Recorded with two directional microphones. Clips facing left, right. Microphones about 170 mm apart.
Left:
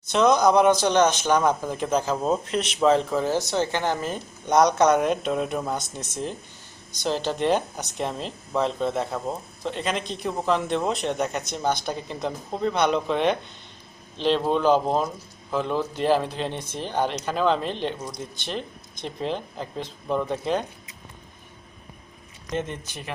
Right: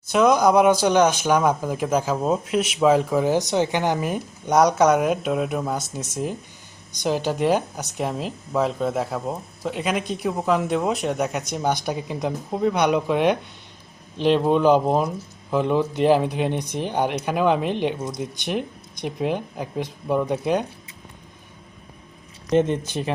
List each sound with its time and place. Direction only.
0.0 s speech: 10° right (ahead or behind)
22.5 s speech: 20° right (ahead or behind)